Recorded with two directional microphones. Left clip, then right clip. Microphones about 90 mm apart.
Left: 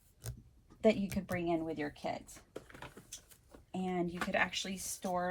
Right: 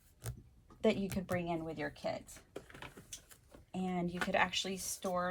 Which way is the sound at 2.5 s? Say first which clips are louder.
Even; 50° left (ahead or behind).